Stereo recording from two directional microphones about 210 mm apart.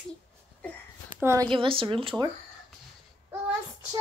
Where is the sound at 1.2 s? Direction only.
15° right (ahead or behind).